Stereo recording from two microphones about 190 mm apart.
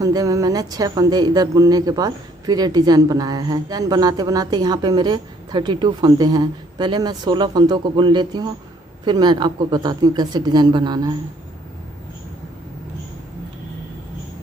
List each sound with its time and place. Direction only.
0.0 s speech: 20° right (ahead or behind)